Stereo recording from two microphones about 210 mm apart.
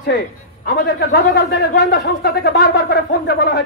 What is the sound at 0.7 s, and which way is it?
Speech, 50° left (ahead or behind).